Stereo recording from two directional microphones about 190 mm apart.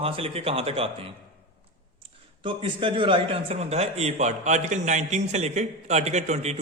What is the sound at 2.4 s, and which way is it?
A man's voice, 25° right (ahead or behind).